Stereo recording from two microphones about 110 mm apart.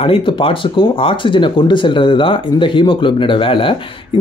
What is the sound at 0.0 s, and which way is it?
Speech, 55° left (ahead or behind).